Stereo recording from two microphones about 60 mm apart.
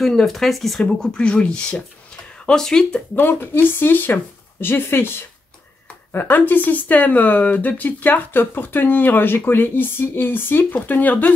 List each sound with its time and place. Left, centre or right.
0.0 s speech: centre
1.0 s speech: centre
3.2 s speech: left
6.1 s speech: left